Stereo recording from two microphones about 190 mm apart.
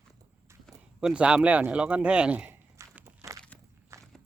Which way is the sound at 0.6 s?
5° right (ahead or behind).